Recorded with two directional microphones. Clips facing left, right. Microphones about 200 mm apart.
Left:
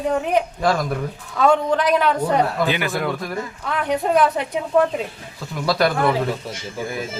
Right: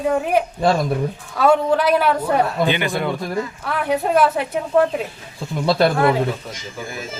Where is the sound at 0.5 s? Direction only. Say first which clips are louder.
Right 2 dB; 25° right (ahead or behind).